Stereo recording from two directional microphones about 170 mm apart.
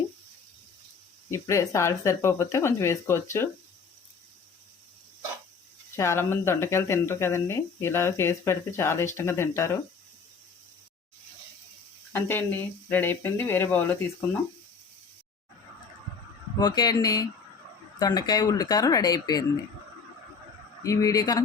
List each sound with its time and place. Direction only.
1.3 s speech: 15° left (ahead or behind)
6.0 s speech: 15° left (ahead or behind)
12.1 s speech: 10° left (ahead or behind)
16.6 s speech: 25° left (ahead or behind)
20.8 s speech: 20° left (ahead or behind)